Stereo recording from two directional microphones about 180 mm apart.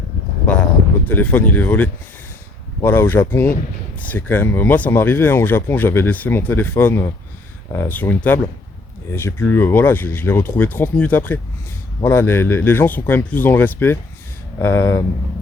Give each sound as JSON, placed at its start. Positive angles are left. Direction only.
{"t": 1.0, "sound": "speech", "side_deg": 10}